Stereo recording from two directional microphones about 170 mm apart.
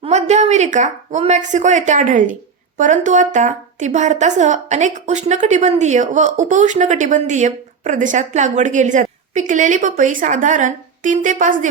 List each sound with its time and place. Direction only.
0.0 s a woman's voice: 40° right (ahead or behind)